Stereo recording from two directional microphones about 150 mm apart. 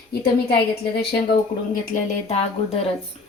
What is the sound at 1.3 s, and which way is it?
Speech, 65° left (ahead or behind).